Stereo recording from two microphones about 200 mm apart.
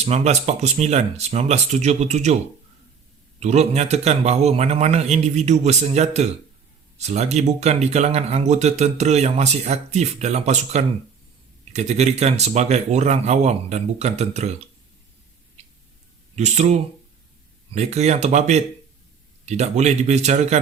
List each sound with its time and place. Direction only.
0.0 s speech: 35° right (ahead or behind)
3.4 s speech: 35° right (ahead or behind)
16.3 s speech: 35° right (ahead or behind)